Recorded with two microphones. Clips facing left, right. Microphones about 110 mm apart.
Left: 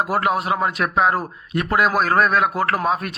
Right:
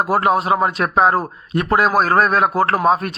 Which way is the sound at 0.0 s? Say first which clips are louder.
Right 4 dB; 30° right (ahead or behind).